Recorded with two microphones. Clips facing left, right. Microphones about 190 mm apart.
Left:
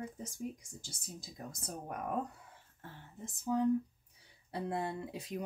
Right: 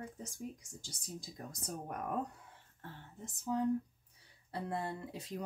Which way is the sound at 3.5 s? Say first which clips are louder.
Left 2 dB; 5° left (ahead or behind).